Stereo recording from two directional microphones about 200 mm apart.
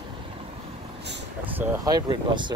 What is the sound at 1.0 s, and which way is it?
Vehicle, 60° right (ahead or behind).